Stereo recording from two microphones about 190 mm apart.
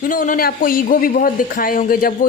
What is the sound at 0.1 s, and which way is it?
A man's voice, 45° left (ahead or behind).